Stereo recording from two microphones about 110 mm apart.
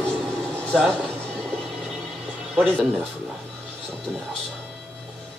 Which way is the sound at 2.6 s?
15° right (ahead or behind).